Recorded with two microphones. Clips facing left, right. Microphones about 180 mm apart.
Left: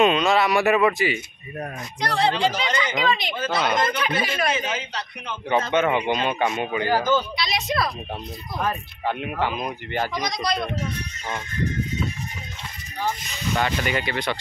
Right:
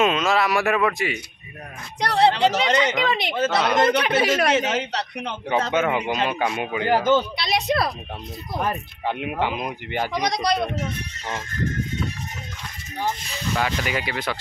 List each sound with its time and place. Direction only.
0.0 s speech: centre (ahead or behind)
2.0 s speech: 65° right (ahead or behind)
5.7 s speech: 5° right (ahead or behind)
6.9 s speech: 25° right (ahead or behind)
7.3 s speech: 60° right (ahead or behind)
8.6 s speech: 15° right (ahead or behind)
10.1 s speech: 65° right (ahead or behind)
13.8 s speech: 5° right (ahead or behind)